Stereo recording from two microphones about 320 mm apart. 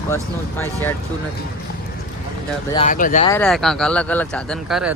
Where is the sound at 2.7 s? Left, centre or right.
Left.